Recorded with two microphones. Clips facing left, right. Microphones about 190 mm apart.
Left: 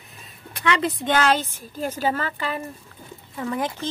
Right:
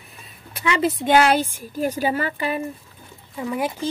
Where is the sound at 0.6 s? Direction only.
5° right (ahead or behind).